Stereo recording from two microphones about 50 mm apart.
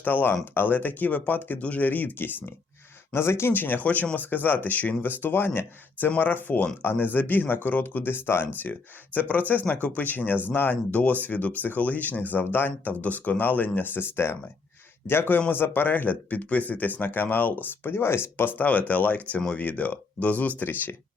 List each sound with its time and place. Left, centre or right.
0.0 s speech: left
3.1 s speech: left
3.5 s speech: left
8.6 s a man's voice: left